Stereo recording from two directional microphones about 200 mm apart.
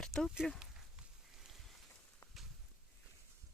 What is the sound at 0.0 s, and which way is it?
Speech, centre (ahead or behind).